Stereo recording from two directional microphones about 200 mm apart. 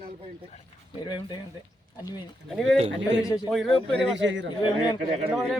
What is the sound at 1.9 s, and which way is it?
Speech, 20° left (ahead or behind).